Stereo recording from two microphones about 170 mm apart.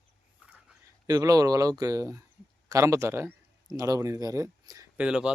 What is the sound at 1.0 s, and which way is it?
Speech, 20° right (ahead or behind).